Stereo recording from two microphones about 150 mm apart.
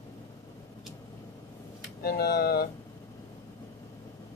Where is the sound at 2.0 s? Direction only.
90° left.